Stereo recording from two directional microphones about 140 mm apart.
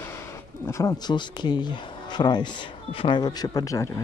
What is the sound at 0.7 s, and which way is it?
Speech, 20° left (ahead or behind).